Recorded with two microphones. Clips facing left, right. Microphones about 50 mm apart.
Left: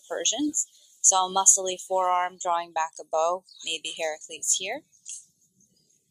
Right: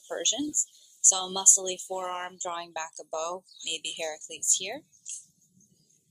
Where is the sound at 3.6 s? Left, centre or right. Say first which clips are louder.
Even; left.